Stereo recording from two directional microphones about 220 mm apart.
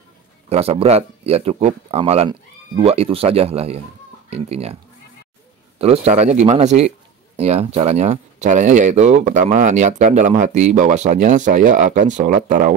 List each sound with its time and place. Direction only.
0.5 s speech: 25° right (ahead or behind)
5.8 s speech: 30° right (ahead or behind)